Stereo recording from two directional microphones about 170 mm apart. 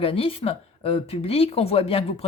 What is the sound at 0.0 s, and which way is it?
Speech, 35° left (ahead or behind).